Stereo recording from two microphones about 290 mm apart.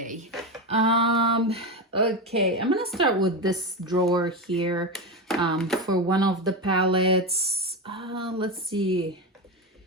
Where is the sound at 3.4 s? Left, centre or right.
Centre.